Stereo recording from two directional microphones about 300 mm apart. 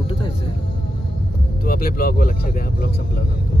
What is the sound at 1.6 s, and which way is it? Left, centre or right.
Speech, left.